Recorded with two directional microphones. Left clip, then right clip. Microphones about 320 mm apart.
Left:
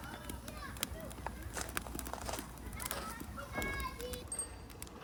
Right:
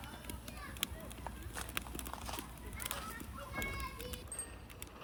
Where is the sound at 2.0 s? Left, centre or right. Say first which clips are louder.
Left 3 dB; left.